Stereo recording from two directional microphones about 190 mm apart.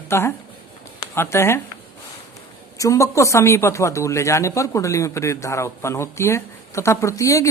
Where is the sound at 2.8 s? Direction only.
15° left (ahead or behind).